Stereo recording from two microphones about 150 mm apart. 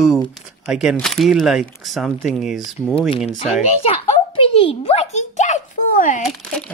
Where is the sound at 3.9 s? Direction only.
35° left (ahead or behind); by 6.2 s 60° left (ahead or behind).